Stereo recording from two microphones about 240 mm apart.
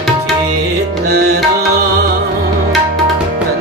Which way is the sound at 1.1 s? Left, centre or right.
Right.